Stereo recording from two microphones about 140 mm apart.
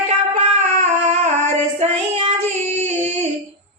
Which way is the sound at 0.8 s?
55° right (ahead or behind).